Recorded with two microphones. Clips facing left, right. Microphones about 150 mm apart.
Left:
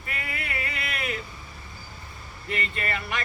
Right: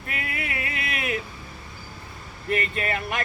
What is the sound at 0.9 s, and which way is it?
Vehicle, 55° right (ahead or behind).